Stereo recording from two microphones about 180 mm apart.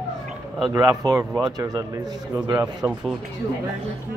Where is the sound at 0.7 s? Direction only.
15° right (ahead or behind).